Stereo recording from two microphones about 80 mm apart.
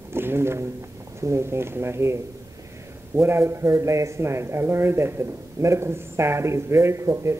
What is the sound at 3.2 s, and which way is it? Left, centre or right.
A man's voice, right.